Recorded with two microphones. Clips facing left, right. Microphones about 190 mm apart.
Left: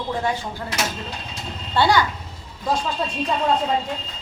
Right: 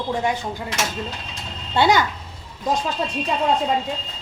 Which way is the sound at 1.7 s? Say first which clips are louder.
Right 1 dB; 20° right (ahead or behind).